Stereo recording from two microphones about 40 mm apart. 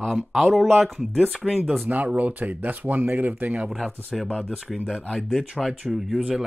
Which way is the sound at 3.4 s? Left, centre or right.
Right.